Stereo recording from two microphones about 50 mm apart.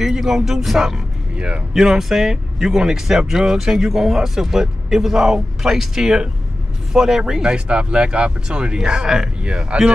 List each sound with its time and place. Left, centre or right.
0.0 s bow-wow: centre
0.5 s speech: centre
9.5 s speech: right